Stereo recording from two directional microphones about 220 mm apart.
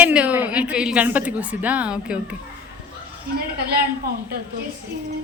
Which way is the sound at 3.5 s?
45° right (ahead or behind).